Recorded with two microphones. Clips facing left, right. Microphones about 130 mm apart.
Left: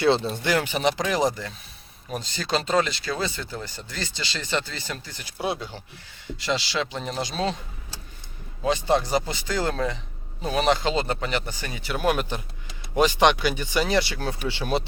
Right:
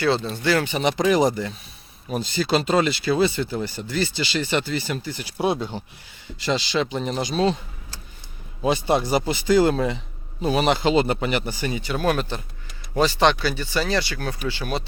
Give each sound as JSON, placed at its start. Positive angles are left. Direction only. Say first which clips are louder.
{"t": 0.0, "sound": "speech", "louder": "left 1 dB", "side_deg": 25}
{"t": 0.4, "sound": "a man's voice", "louder": "right 4 dB", "side_deg": 15}
{"t": 0.8, "sound": "speech", "louder": "right 4 dB", "side_deg": 0}
{"t": 5.4, "sound": "speech", "louder": "right 5 dB", "side_deg": -20}
{"t": 6.4, "sound": "speech", "louder": "right 4 dB", "side_deg": 0}
{"t": 8.6, "sound": "speech", "louder": "right 2 dB", "side_deg": -10}
{"t": 11.9, "sound": "a man's voice", "louder": "even", "side_deg": 10}